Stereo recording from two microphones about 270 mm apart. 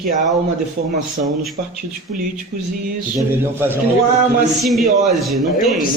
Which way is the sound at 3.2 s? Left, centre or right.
Centre.